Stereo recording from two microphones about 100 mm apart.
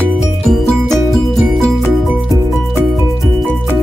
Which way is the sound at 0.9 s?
Centre (ahead or behind).